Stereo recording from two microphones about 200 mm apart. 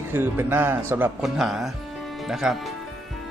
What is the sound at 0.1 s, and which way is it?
A man's voice, 10° right (ahead or behind).